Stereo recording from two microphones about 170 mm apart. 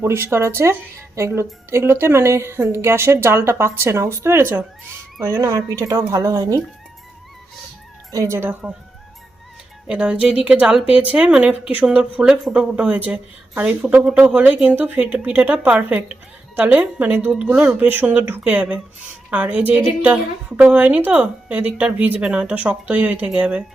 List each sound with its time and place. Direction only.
0.0 s speech: 15° right (ahead or behind)
8.1 s speech: 15° right (ahead or behind)
9.8 s speech: 5° right (ahead or behind)